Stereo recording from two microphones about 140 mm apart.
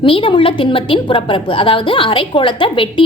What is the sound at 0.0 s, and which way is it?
A woman's voice, 40° left (ahead or behind).